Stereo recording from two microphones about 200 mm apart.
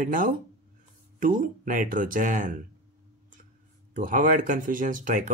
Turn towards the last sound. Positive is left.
turn(degrees=-40)  # may be behind; listen again after turning